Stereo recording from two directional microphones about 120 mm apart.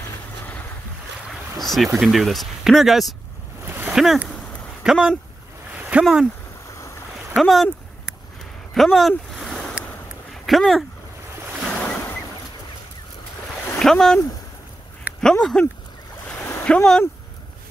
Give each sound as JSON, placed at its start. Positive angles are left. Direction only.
{"t": 1.6, "sound": "speech", "side_deg": 0}
{"t": 3.6, "sound": "a sound", "side_deg": -15}
{"t": 3.9, "sound": "speech", "side_deg": 0}
{"t": 5.8, "sound": "a sound", "side_deg": -10}
{"t": 6.7, "sound": "boat", "side_deg": 25}
{"t": 7.3, "sound": "speech", "side_deg": 0}
{"t": 8.7, "sound": "a sound", "side_deg": 0}
{"t": 10.3, "sound": "speech", "side_deg": 0}
{"t": 11.8, "sound": "boat", "side_deg": 10}
{"t": 13.7, "sound": "speech", "side_deg": 5}
{"t": 15.2, "sound": "speech", "side_deg": 5}
{"t": 16.3, "sound": "splash", "side_deg": 15}